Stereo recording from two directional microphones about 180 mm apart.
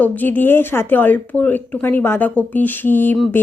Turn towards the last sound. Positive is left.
turn(degrees=10)  # may be behind; listen again after turning